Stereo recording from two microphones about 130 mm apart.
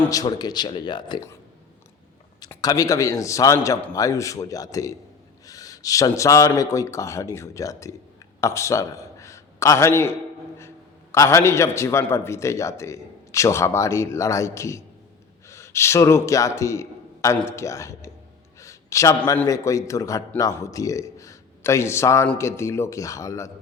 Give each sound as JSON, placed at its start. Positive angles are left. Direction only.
{"t": 0.1, "sound": "speech", "side_deg": 30}
{"t": 2.6, "sound": "a man's voice", "side_deg": 25}
{"t": 18.6, "sound": "a sound", "side_deg": 25}
{"t": 19.5, "sound": "a man's voice", "side_deg": 25}